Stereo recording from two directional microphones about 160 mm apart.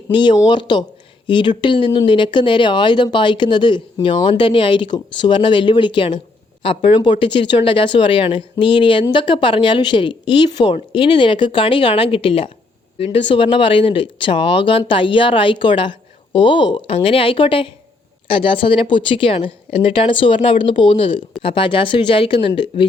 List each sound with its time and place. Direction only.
0.1 s speech: 30° left (ahead or behind)